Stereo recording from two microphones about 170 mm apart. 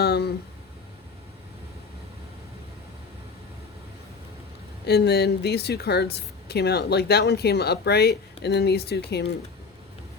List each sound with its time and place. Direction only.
0.0 s speech: 70° left (ahead or behind)
4.9 s a woman's voice: 75° left (ahead or behind)